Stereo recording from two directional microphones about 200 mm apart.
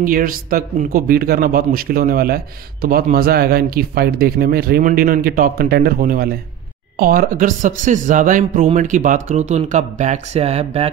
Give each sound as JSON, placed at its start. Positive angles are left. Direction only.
{"t": 0.0, "sound": "a man's voice", "side_deg": -45}